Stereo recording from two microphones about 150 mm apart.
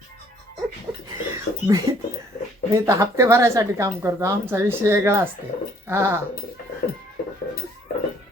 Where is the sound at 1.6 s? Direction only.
25° right (ahead or behind).